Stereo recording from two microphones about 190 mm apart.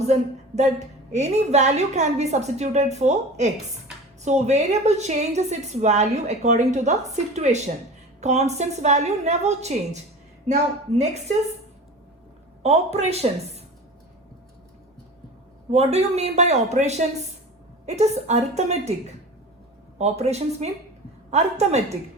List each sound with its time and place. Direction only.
0.0 s a woman's voice: 35° right (ahead or behind)
12.6 s a woman's voice: 35° right (ahead or behind)
15.7 s a woman's voice: 35° right (ahead or behind)
20.0 s a woman's voice: 35° right (ahead or behind)